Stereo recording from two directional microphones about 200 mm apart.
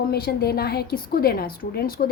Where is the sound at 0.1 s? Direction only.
50° left (ahead or behind).